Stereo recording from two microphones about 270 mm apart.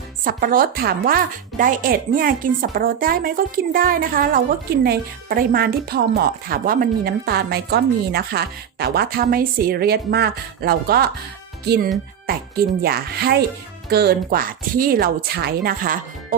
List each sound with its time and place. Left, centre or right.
0.3 s speech: right